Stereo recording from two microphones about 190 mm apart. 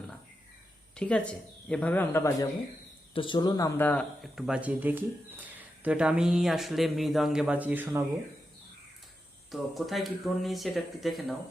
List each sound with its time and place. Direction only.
0.9 s speech: 5° left (ahead or behind)
3.2 s speech: 25° left (ahead or behind); by 8.0 s 10° right (ahead or behind)
9.5 s speech: centre (ahead or behind)